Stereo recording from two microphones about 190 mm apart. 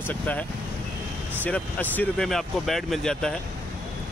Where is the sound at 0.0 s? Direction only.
10° left (ahead or behind).